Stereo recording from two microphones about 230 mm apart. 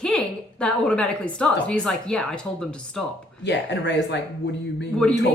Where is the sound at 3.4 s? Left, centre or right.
Left.